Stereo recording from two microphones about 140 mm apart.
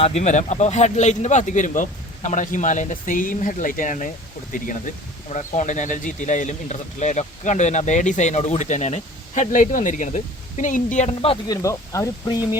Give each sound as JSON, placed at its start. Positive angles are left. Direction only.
{"t": 0.0, "sound": "a man's voice", "side_deg": 50}
{"t": 5.3, "sound": "a man's voice", "side_deg": 60}
{"t": 11.4, "sound": "speech", "side_deg": 20}